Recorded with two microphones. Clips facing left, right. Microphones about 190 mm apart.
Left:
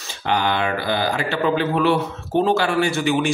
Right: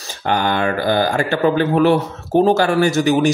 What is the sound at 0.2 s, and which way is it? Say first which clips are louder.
Speech: right 3 dB; 45° right (ahead or behind).